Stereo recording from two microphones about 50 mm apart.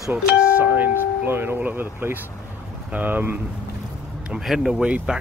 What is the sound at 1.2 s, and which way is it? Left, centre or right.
Speech, right.